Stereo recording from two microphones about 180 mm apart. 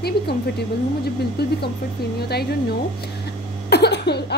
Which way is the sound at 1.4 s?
65° left (ahead or behind).